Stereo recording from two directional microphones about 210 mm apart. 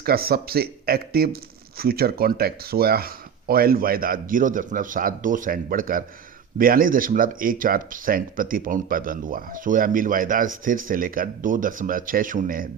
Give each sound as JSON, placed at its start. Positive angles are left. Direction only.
{"t": 0.0, "sound": "speech", "side_deg": -45}